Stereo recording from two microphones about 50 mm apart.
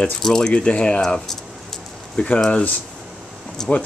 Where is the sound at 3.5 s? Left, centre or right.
Centre.